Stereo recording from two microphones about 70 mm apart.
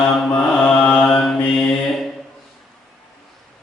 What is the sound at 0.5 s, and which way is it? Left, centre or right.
Mantra, centre.